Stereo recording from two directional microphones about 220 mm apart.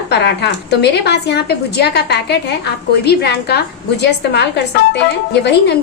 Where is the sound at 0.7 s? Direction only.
50° left (ahead or behind).